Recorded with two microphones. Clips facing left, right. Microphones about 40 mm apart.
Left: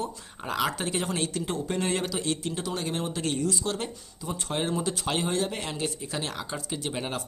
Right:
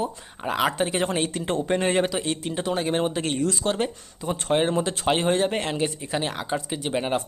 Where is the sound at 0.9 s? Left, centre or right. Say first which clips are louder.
Right 5 dB; right.